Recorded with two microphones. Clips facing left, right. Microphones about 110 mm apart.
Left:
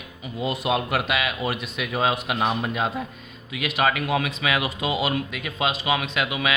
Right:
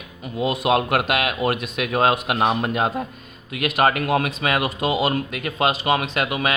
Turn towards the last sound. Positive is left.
turn(degrees=-45)  # may be behind; listen again after turning